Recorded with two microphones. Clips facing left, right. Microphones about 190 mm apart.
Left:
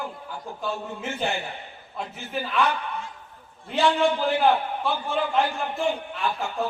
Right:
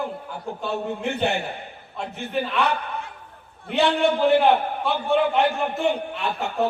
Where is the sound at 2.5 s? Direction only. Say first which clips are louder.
Right 1 dB; 65° right (ahead or behind).